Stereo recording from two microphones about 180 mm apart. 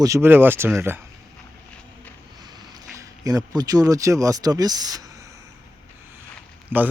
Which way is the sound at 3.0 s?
20° right (ahead or behind).